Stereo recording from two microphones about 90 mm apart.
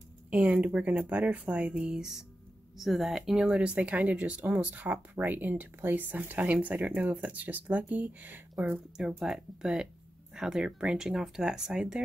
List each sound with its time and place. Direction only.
0.3 s speech: 15° right (ahead or behind)